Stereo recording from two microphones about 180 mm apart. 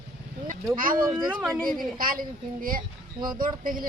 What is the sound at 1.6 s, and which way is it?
Speech, 50° right (ahead or behind).